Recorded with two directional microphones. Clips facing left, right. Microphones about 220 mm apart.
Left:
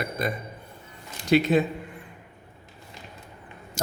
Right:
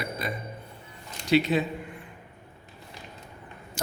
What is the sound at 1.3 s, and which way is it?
Speech, 50° left (ahead or behind).